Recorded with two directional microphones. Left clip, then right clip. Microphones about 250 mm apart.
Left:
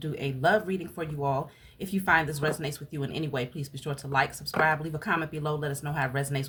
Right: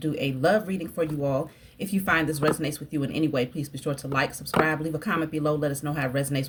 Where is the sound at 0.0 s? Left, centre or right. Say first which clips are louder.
Right 3 dB; centre.